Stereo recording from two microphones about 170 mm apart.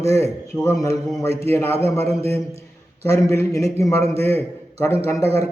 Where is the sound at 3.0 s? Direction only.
15° left (ahead or behind).